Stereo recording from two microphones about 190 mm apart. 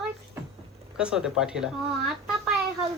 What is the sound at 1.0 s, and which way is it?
Speech, 5° right (ahead or behind).